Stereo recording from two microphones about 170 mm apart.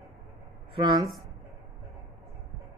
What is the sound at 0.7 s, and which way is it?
Speech, 25° right (ahead or behind).